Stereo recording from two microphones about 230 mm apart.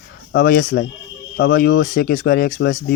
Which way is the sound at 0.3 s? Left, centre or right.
Left.